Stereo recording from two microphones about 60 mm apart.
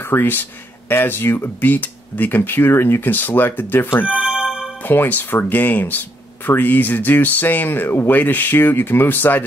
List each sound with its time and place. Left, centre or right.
0.0 s speech: left
4.0 s music: centre
4.8 s speech: left